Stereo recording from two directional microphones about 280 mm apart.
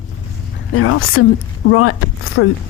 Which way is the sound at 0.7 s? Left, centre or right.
Left.